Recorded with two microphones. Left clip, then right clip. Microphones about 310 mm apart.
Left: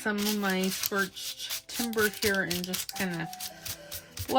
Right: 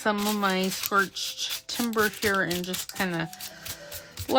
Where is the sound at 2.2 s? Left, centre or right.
Centre.